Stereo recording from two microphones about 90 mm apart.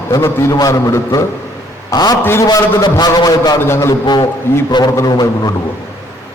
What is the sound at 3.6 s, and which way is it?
Speech, 30° left (ahead or behind).